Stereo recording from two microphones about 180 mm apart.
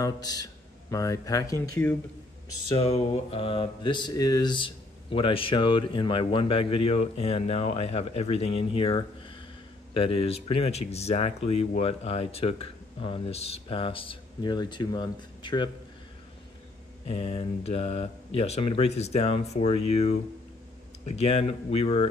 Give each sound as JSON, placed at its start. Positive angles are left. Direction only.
{"t": 0.0, "sound": "a man's voice", "side_deg": 20}
{"t": 2.7, "sound": "mantra", "side_deg": 30}
{"t": 9.9, "sound": "speech", "side_deg": 30}
{"t": 17.1, "sound": "speech", "side_deg": 35}